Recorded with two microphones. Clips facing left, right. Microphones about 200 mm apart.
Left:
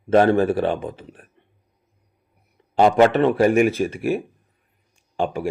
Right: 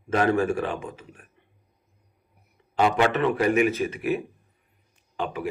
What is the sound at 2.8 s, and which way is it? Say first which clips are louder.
Speech: left 7 dB; 40° left (ahead or behind).